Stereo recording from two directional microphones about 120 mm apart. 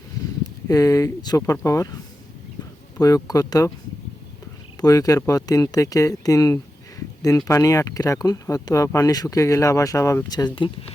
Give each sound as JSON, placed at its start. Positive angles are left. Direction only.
{"t": 0.7, "sound": "speech", "side_deg": 30}
{"t": 3.2, "sound": "speech", "side_deg": 30}
{"t": 4.8, "sound": "speech", "side_deg": 30}